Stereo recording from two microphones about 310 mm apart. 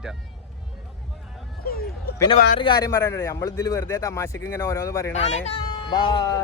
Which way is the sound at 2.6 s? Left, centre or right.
Centre.